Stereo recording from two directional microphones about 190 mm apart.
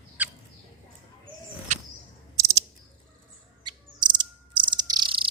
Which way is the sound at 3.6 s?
25° right (ahead or behind).